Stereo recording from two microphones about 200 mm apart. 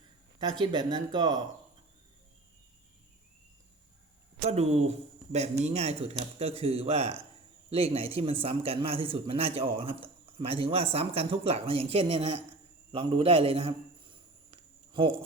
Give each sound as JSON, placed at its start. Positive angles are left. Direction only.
{"t": 0.6, "sound": "a man's voice", "side_deg": -25}
{"t": 4.4, "sound": "a man's voice", "side_deg": -30}
{"t": 12.9, "sound": "a sound", "side_deg": -25}